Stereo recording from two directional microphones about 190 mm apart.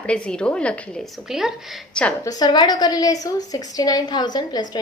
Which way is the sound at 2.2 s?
20° left (ahead or behind).